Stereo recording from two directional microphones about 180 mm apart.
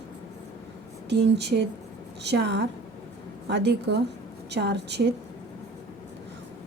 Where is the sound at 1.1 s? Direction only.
70° right (ahead or behind).